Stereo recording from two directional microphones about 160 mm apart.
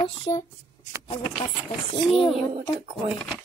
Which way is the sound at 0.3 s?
20° left (ahead or behind).